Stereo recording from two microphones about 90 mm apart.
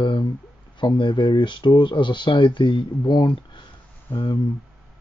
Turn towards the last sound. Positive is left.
turn(degrees=55)  # may be behind; listen again after turning